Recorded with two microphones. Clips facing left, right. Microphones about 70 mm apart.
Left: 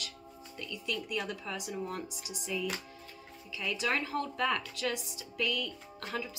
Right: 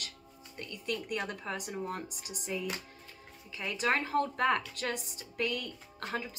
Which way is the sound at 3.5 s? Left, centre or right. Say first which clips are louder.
Right 2 dB; right.